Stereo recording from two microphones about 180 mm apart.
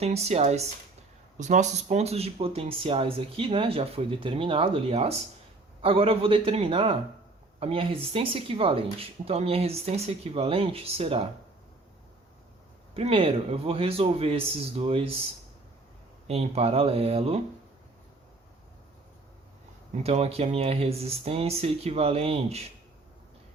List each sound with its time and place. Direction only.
0.0 s speech: 35° right (ahead or behind)
12.9 s speech: 30° right (ahead or behind)
16.2 s speech: 35° right (ahead or behind)
20.0 s speech: 35° right (ahead or behind)